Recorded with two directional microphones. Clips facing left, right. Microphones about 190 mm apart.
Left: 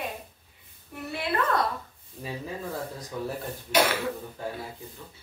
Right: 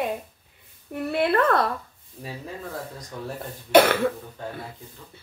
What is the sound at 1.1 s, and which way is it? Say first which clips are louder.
Speech: right 7 dB; 60° right (ahead or behind).